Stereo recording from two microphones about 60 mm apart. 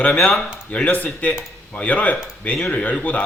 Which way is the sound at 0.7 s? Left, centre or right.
Left.